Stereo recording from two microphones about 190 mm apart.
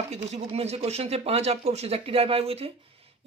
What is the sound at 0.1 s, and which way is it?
Speech, 35° right (ahead or behind).